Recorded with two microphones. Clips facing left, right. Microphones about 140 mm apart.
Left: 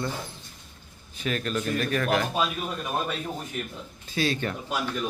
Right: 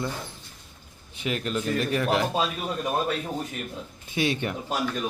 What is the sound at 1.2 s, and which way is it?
A man's voice, 20° right (ahead or behind).